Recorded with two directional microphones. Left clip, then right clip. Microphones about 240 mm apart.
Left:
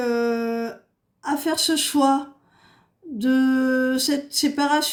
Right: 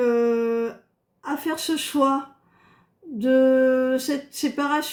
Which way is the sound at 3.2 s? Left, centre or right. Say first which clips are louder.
Right 4 dB; left.